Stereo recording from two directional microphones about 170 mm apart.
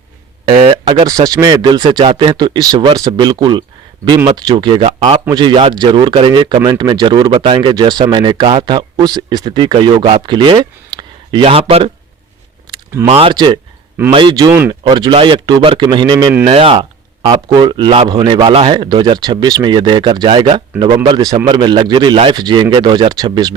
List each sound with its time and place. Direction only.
0.4 s speech: 35° right (ahead or behind)
1.0 s speech: 20° right (ahead or behind); by 5.2 s 35° right (ahead or behind)
5.3 s speech: 25° right (ahead or behind)
13.1 s speech: 35° right (ahead or behind)